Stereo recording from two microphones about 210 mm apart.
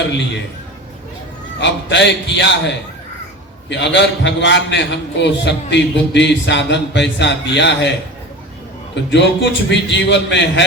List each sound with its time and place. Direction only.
1.5 s a man's voice: 55° left (ahead or behind)
9.0 s a man's voice: 55° left (ahead or behind)